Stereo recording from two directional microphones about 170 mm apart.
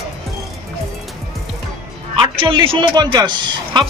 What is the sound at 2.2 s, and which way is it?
A man's voice, 30° right (ahead or behind).